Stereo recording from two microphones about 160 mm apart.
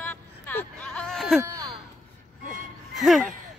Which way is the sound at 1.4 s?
20° right (ahead or behind).